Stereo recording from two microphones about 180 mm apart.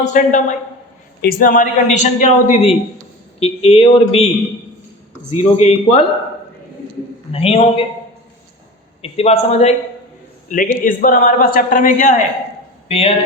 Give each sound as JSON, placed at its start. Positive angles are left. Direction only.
{"t": 0.0, "sound": "a man's voice", "side_deg": 45}
{"t": 1.2, "sound": "a woman's voice", "side_deg": 55}
{"t": 5.3, "sound": "a woman's voice", "side_deg": 35}
{"t": 7.3, "sound": "a woman's voice", "side_deg": 35}
{"t": 9.0, "sound": "a woman's voice", "side_deg": 35}
{"t": 10.5, "sound": "a man's voice", "side_deg": 50}
{"t": 12.9, "sound": "a woman's voice", "side_deg": 35}